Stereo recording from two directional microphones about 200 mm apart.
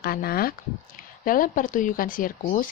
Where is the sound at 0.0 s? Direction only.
50° left (ahead or behind).